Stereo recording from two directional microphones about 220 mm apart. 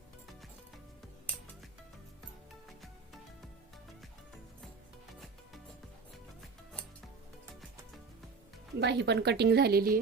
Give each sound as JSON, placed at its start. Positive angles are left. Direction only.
{"t": 2.6, "sound": "music", "side_deg": 0}
{"t": 8.8, "sound": "a woman's voice", "side_deg": -50}